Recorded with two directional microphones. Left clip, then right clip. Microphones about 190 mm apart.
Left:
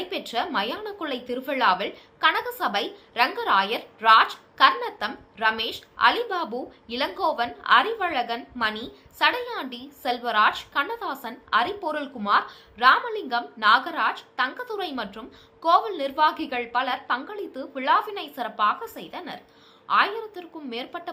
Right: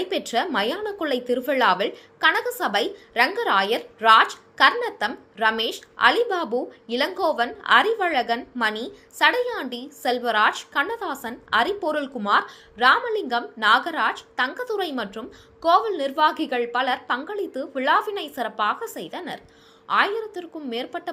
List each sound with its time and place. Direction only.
0.1 s a woman's voice: 25° right (ahead or behind)